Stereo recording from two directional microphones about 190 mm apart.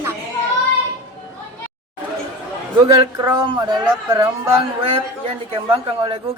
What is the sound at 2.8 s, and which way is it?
Speech, 25° right (ahead or behind).